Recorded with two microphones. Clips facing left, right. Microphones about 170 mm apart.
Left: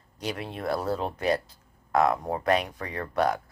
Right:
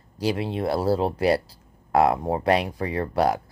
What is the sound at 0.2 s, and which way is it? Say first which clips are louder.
Speech: right 8 dB; 30° right (ahead or behind).